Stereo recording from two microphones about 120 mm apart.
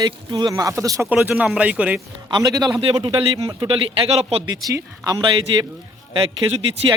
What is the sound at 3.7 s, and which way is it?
Speech, 55° right (ahead or behind).